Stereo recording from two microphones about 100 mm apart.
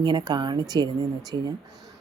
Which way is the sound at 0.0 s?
45° right (ahead or behind).